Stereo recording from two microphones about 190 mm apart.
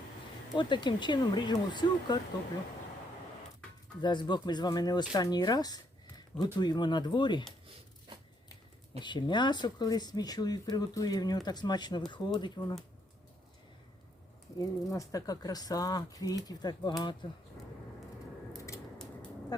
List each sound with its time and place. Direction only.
0.5 s speech: 25° left (ahead or behind)
4.0 s speech: 25° left (ahead or behind)
9.0 s speech: 25° left (ahead or behind)
14.6 s speech: 20° left (ahead or behind)